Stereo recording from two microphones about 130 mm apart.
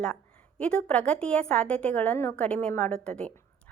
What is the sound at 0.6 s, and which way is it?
A woman's voice, 10° left (ahead or behind).